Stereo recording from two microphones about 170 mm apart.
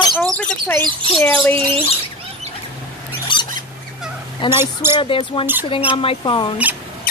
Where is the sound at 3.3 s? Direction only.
30° left (ahead or behind).